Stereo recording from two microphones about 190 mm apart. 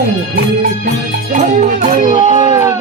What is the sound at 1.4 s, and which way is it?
Speech, 40° right (ahead or behind).